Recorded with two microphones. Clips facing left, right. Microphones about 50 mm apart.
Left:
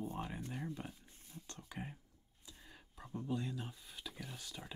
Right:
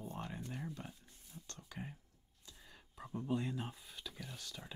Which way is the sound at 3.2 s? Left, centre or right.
Right.